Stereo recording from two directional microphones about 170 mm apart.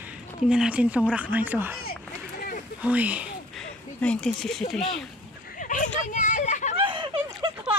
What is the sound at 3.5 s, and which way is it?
Speech, 5° left (ahead or behind).